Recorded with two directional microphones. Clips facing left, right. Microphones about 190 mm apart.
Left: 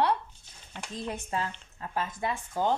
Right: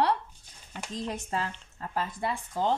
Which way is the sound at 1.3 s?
35° right (ahead or behind).